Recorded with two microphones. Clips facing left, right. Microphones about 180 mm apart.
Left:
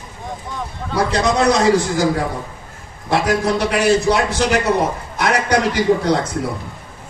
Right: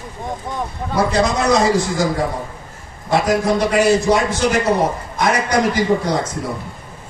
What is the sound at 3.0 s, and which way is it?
A man's voice, 70° left (ahead or behind).